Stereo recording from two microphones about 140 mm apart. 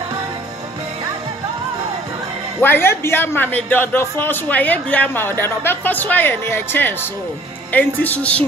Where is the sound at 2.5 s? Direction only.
15° left (ahead or behind).